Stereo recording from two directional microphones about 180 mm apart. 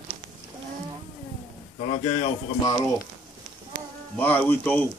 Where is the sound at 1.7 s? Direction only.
35° left (ahead or behind).